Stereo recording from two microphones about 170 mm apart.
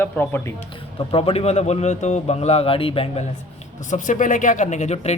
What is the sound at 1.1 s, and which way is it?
A man's voice, 35° left (ahead or behind).